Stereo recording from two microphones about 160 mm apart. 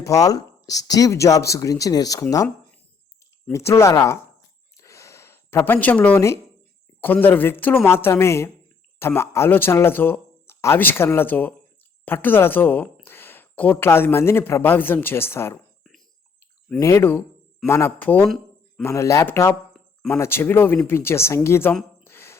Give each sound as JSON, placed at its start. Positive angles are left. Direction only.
{"t": 0.0, "sound": "speech", "side_deg": 20}
{"t": 3.5, "sound": "speech", "side_deg": 15}
{"t": 4.8, "sound": "a sound", "side_deg": 20}
{"t": 7.0, "sound": "speech", "side_deg": 10}
{"t": 16.8, "sound": "speech", "side_deg": 15}
{"t": 22.0, "sound": "a sound", "side_deg": 15}